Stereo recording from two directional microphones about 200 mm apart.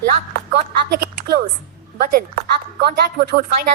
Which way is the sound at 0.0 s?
45° right (ahead or behind).